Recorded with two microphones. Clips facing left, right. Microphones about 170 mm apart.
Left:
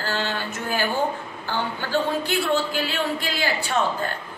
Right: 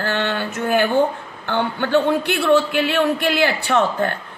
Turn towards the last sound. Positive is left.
turn(degrees=-65)  # may be behind; listen again after turning